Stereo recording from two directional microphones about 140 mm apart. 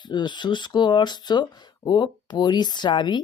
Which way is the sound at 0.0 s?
30° left (ahead or behind).